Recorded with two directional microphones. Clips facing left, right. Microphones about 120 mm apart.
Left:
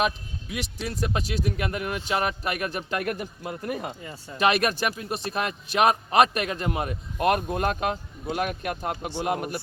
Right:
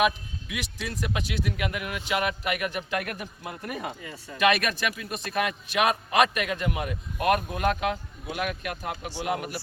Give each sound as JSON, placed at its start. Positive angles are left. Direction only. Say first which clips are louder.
{"t": 0.0, "sound": "speech", "louder": "right 2 dB", "side_deg": 35}